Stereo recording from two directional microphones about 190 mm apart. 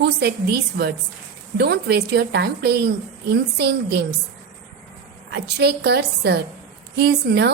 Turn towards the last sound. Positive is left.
turn(degrees=-60)  # may be behind; listen again after turning